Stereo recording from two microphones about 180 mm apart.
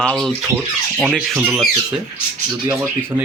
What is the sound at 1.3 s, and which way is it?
Speech, 5° right (ahead or behind).